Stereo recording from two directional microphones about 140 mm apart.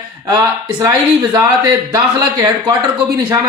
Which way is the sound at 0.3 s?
25° right (ahead or behind).